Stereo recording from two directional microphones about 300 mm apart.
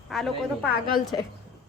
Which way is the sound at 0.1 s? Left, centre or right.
Centre.